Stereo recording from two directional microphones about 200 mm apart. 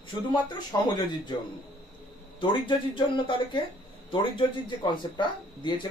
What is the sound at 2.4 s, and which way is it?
Speech, 25° left (ahead or behind).